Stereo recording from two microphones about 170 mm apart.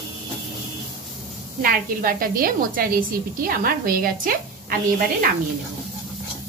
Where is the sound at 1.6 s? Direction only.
55° right (ahead or behind).